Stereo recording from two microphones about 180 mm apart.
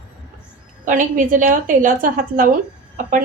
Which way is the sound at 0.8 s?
45° right (ahead or behind).